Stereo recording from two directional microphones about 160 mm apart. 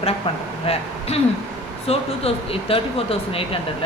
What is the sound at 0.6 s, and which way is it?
Speech, 40° left (ahead or behind).